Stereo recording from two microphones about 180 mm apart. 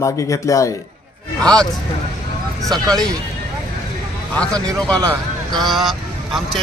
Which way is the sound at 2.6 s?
Centre (ahead or behind).